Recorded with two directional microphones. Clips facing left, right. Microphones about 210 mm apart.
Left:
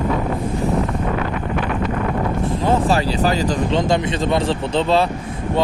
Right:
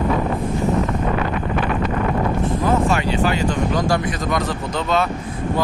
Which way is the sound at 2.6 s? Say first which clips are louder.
Left 2 dB; 35° left (ahead or behind).